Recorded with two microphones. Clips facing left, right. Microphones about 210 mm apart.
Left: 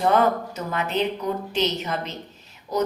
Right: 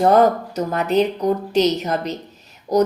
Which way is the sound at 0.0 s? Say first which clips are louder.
Right 6 dB; 40° right (ahead or behind).